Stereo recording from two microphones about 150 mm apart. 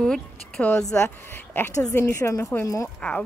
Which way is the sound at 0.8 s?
15° left (ahead or behind).